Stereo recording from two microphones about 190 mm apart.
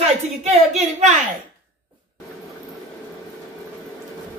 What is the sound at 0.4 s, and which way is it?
Speech, 35° right (ahead or behind).